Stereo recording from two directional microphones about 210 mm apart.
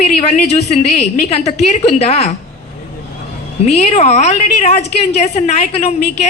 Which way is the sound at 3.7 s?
30° left (ahead or behind).